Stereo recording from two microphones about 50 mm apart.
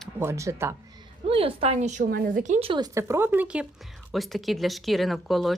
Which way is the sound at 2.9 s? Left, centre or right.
Right.